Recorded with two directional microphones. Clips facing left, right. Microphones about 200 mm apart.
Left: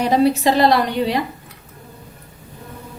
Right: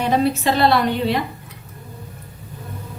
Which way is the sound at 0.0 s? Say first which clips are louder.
Left 3 dB; 35° left (ahead or behind).